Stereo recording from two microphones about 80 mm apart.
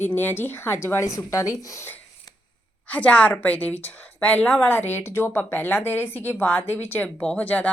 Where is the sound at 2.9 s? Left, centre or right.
Centre.